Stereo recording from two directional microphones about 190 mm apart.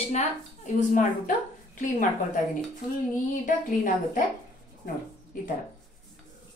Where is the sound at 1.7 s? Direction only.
40° left (ahead or behind).